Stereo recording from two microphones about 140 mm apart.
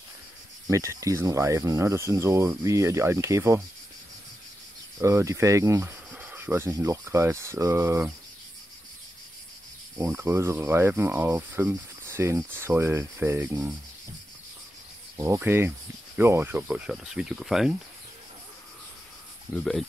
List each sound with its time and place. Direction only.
0.7 s speech: 20° right (ahead or behind)
4.9 s speech: 20° right (ahead or behind)
9.9 s speech: 20° right (ahead or behind)
15.1 s speech: 20° right (ahead or behind); by 17.7 s 5° right (ahead or behind)
19.5 s speech: 5° left (ahead or behind)